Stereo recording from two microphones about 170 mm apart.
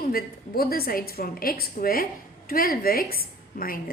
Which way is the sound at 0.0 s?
60° left (ahead or behind).